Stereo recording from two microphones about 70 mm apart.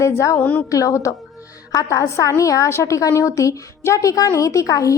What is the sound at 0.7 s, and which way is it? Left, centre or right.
A woman's voice, left.